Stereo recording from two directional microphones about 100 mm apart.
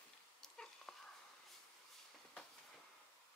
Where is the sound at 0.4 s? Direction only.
5° left (ahead or behind).